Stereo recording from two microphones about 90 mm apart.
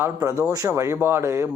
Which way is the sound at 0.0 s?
35° right (ahead or behind).